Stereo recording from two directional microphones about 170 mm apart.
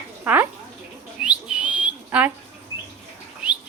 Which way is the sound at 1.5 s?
5° right (ahead or behind).